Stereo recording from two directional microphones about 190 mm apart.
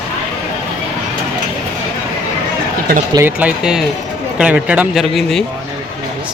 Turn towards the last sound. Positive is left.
turn(degrees=0)  # may be behind; listen again after turning